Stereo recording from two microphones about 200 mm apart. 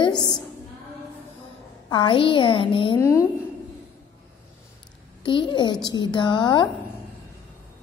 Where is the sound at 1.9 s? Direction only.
25° left (ahead or behind).